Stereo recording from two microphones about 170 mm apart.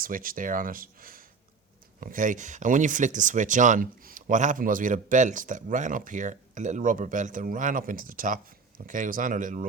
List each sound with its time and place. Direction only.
0.0 s speech: 55° right (ahead or behind)